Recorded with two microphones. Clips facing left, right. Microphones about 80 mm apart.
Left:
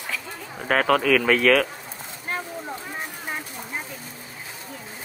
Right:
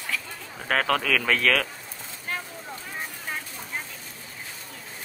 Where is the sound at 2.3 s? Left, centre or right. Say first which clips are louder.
Left 4 dB; left.